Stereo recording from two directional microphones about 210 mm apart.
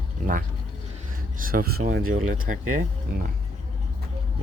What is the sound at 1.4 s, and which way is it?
Speech, 45° right (ahead or behind).